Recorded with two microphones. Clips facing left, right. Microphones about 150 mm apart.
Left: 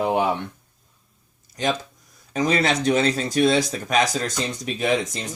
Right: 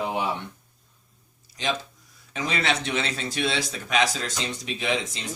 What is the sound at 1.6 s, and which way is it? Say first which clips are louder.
Speech: left 4 dB; 45° left (ahead or behind).